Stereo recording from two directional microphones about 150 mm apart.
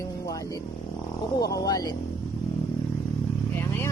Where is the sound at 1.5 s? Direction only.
25° left (ahead or behind).